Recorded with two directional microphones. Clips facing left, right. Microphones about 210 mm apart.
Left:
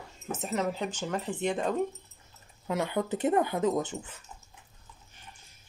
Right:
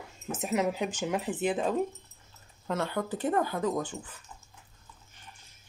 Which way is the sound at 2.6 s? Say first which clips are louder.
Left 2 dB; 15° left (ahead or behind).